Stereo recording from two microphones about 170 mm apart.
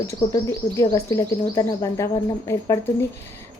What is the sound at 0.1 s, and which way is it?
A woman's voice, 20° left (ahead or behind).